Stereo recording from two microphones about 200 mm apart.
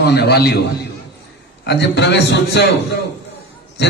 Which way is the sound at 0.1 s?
55° left (ahead or behind).